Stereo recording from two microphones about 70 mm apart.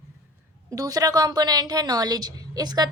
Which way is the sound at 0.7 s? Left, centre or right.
Right.